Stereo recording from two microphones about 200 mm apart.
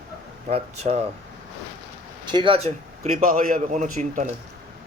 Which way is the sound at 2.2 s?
25° right (ahead or behind).